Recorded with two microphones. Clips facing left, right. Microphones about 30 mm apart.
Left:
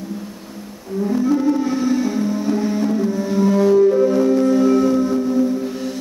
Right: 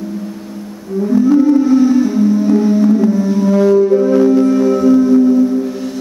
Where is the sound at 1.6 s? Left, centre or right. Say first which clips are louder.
Right 8 dB; centre.